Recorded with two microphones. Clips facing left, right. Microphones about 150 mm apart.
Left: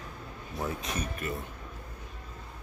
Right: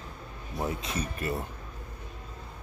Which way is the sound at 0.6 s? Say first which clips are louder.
Right 2 dB; 30° right (ahead or behind).